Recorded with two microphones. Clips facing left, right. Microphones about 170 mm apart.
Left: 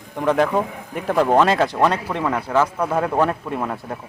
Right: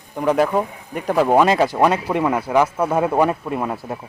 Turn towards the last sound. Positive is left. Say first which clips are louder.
# right 2 dB
turn(degrees=-5)  # may be behind; listen again after turning